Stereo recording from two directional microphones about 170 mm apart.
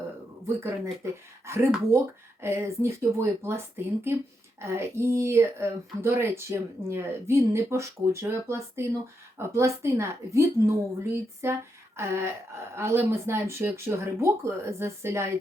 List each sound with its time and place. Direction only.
1.5 s speech: 15° right (ahead or behind)